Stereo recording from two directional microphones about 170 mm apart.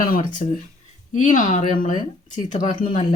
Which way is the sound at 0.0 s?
50° left (ahead or behind).